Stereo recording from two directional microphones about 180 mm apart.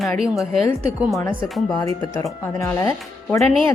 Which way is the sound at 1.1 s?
15° left (ahead or behind).